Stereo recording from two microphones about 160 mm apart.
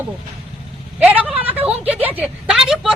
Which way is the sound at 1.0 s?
10° right (ahead or behind).